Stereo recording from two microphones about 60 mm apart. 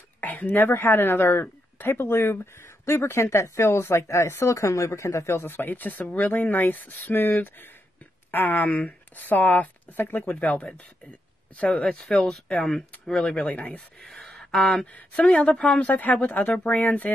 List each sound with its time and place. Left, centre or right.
0.2 s a sound: left
0.7 s speech: left
10.2 s speech: centre
12.0 s speech: centre
13.4 s speech: left
14.0 s a sound: centre
14.6 s speech: centre; by 17.1 s left